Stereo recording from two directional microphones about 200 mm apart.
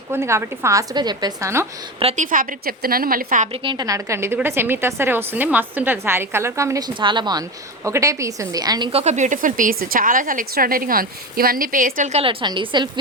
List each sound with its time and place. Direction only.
0.1 s a woman's voice: 15° right (ahead or behind)
2.0 s a woman's voice: 35° right (ahead or behind)
3.6 s a woman's voice: 20° right (ahead or behind)